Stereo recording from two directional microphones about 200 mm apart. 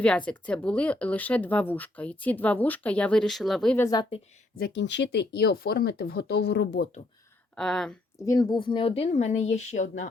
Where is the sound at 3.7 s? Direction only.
15° left (ahead or behind).